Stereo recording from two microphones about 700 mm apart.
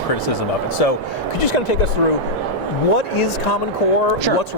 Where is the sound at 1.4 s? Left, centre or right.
Left.